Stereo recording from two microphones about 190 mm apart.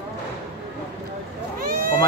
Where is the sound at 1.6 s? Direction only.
50° right (ahead or behind).